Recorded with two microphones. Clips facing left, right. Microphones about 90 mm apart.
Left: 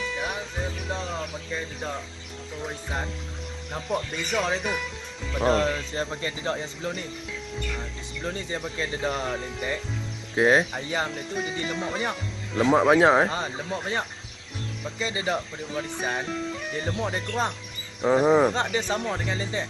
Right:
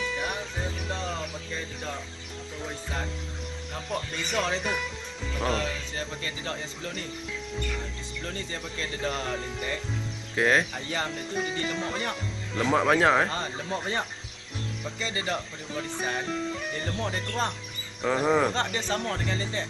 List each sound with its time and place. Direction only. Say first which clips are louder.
0.0 s music: left 1 dB; centre (ahead or behind)
2.6 s speech: left 3 dB; 20° left (ahead or behind)
3.9 s speech: left 3 dB; 5° left (ahead or behind)
5.4 s speech: left 7 dB; 35° left (ahead or behind)
8.2 s speech: left 5 dB; 20° left (ahead or behind)
11.1 s speech: even; 5° left (ahead or behind); by 13.4 s 20° left (ahead or behind)
13.7 s speech: even; 5° left (ahead or behind)
15.0 s speech: left 4 dB; 15° left (ahead or behind)
16.8 s speech: left 5 dB; 10° left (ahead or behind)